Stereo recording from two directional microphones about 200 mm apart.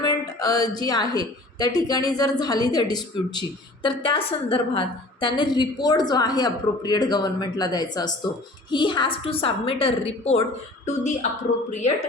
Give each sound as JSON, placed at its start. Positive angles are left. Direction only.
{"t": 0.0, "sound": "a woman's voice", "side_deg": 20}